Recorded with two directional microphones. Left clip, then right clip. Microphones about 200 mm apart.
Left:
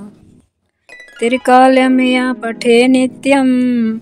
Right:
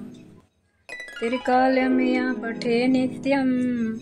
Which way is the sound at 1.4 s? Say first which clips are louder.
Left 12 dB; 40° left (ahead or behind).